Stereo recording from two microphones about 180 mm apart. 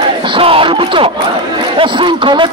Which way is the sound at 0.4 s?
30° right (ahead or behind).